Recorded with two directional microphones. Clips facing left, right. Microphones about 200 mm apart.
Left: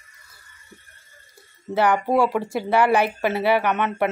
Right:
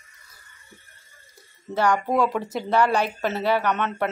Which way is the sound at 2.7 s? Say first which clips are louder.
Left 2 dB; 15° left (ahead or behind).